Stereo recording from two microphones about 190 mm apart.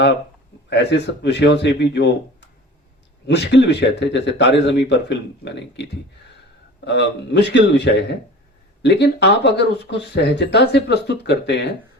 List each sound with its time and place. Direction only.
0.7 s speech: 65° left (ahead or behind)
6.8 s speech: 65° left (ahead or behind)